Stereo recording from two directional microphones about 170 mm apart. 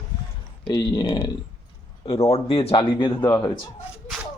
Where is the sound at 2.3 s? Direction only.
35° left (ahead or behind).